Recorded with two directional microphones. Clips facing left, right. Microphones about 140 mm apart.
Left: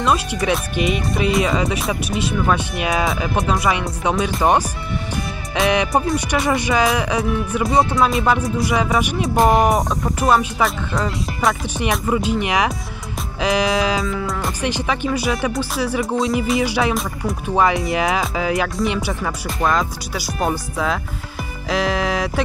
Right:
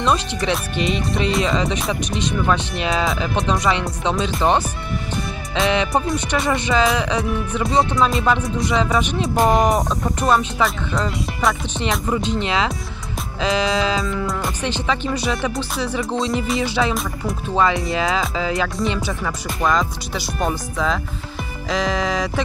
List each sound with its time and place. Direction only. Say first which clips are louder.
0.0 s speech: left 1 dB; 5° left (ahead or behind)
5.7 s speech: left 2 dB; 15° left (ahead or behind)
14.0 s speech: even; centre (ahead or behind)
14.6 s speech: left 2 dB; 10° left (ahead or behind)